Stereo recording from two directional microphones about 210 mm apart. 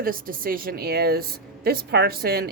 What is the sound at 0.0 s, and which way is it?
A woman's voice, 40° right (ahead or behind).